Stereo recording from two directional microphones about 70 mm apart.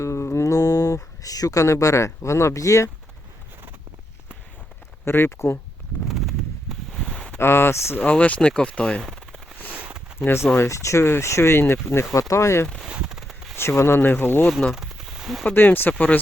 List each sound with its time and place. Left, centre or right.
0.0 s speech: left
5.0 s speech: left
6.1 s a sound: centre
7.3 s speech: left
7.9 s speech: left
9.0 s machine gun: centre
9.7 s a sound: right
10.6 s speech: left
12.8 s a sound: centre
13.6 s speech: left
14.7 s a sound: centre
15.4 s speech: left